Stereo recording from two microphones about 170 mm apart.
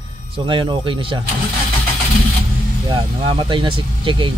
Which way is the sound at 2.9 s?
30° right (ahead or behind).